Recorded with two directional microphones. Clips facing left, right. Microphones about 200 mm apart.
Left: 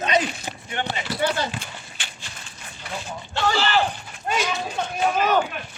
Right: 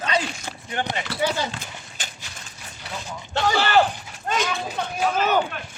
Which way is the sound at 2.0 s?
40° right (ahead or behind).